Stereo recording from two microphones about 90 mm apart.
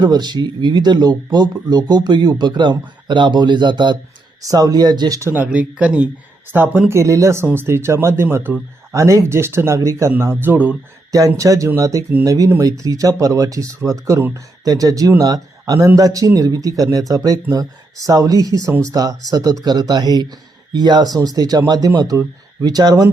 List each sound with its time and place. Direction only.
0.0 s speech: 50° right (ahead or behind)
4.4 s speech: 40° right (ahead or behind)
5.3 s speech: 15° right (ahead or behind); by 7.4 s 35° right (ahead or behind)
7.4 s speech: 25° right (ahead or behind)
9.0 s speech: 35° right (ahead or behind); by 10.8 s 20° right (ahead or behind)
11.3 s speech: 35° right (ahead or behind)